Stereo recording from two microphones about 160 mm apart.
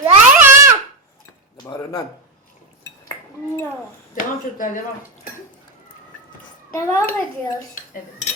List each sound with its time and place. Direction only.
0.0 s babbling: 15° right (ahead or behind)
3.1 s dishes: 15° left (ahead or behind)
4.1 s speech: 55° left (ahead or behind)
6.7 s a child's voice: 15° left (ahead or behind)